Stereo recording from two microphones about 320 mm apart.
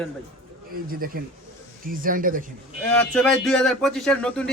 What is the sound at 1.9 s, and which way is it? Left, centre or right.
Speech, right.